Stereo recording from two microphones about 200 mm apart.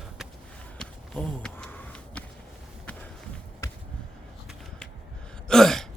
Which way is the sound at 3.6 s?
15° left (ahead or behind).